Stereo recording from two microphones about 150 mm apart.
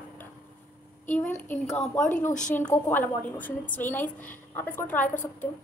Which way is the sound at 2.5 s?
15° left (ahead or behind).